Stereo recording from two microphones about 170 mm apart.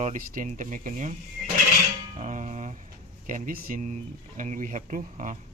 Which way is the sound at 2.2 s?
45° right (ahead or behind).